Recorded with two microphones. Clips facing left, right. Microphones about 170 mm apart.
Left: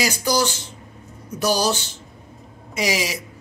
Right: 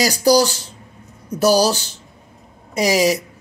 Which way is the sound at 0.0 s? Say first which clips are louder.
Right 7 dB; 35° right (ahead or behind).